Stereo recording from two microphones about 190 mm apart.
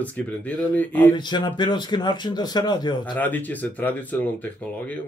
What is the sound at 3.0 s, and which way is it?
Speech, 10° left (ahead or behind).